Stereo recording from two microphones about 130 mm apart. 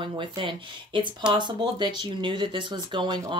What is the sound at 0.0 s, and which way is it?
Speech, 40° right (ahead or behind).